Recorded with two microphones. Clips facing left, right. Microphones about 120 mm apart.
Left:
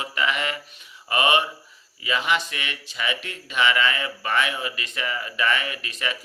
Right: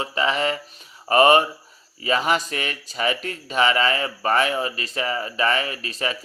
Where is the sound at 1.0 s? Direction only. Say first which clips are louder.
Right 7 dB; 40° right (ahead or behind).